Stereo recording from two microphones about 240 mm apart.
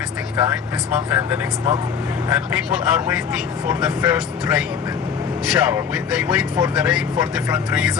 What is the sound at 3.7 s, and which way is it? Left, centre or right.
Speech, centre.